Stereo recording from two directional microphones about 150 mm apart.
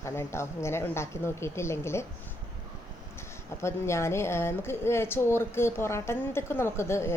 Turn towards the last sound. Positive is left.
turn(degrees=15)  # may be behind; listen again after turning